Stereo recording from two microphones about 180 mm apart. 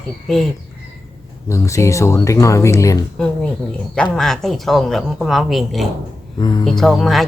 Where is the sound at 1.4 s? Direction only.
15° left (ahead or behind).